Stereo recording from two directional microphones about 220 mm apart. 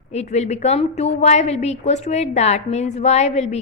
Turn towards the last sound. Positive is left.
turn(degrees=30)  # may be behind; listen again after turning